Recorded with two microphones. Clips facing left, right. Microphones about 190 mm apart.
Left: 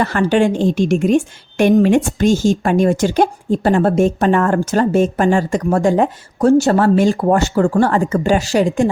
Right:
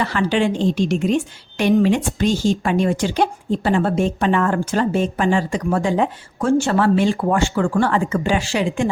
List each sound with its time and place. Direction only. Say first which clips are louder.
0.0 s a woman's voice: left 4 dB; 50° left (ahead or behind)